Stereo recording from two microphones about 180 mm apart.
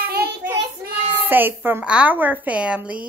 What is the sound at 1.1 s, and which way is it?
A woman's voice, 10° right (ahead or behind).